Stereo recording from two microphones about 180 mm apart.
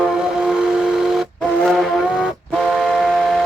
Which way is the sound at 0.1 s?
5° right (ahead or behind).